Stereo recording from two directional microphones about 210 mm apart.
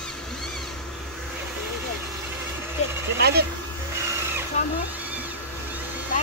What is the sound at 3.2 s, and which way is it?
Speech, 50° right (ahead or behind).